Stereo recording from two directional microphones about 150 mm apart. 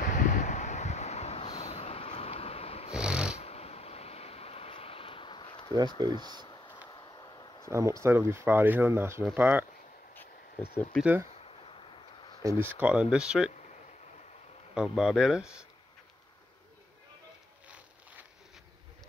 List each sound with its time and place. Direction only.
0.0 s a sound: 55° left (ahead or behind)
2.9 s snoring: 5° right (ahead or behind)
3.3 s vehicle: 45° left (ahead or behind)
6.0 s speech: 25° right (ahead or behind)
6.9 s a sound: 25° left (ahead or behind)
7.7 s speech: 20° right (ahead or behind)
10.5 s a sound: 40° left (ahead or behind)
12.4 s speech: 15° right (ahead or behind)
14.7 s speech: 5° right (ahead or behind)